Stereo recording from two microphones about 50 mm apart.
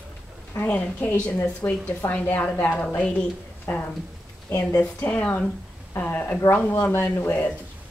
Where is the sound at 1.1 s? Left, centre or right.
Left.